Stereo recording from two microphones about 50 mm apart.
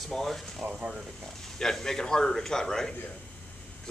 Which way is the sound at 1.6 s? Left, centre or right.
Centre.